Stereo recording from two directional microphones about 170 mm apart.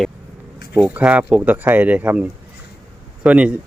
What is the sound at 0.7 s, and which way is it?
Speech, 10° right (ahead or behind).